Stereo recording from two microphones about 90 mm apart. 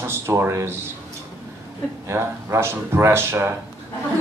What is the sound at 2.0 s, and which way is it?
A man's voice, 30° right (ahead or behind).